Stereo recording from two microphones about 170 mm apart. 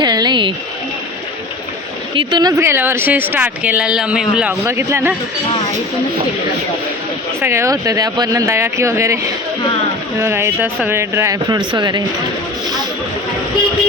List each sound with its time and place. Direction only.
0.0 s a sound: 25° right (ahead or behind)
2.1 s speech: 25° right (ahead or behind)
7.4 s speech: 15° right (ahead or behind)
10.2 s speech: 15° right (ahead or behind)